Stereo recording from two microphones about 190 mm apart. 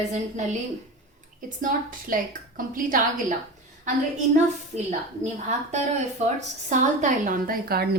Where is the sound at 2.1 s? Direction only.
45° right (ahead or behind).